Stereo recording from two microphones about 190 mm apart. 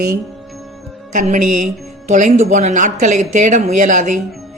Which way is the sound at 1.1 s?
40° right (ahead or behind).